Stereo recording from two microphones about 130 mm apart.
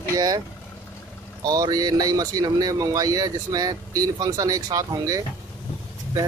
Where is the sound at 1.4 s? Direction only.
30° right (ahead or behind).